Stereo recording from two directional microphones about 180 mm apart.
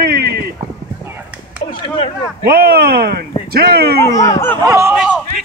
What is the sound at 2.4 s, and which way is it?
Speech, 55° right (ahead or behind).